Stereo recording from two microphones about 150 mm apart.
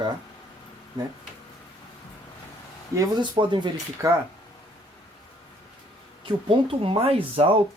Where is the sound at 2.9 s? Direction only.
25° right (ahead or behind).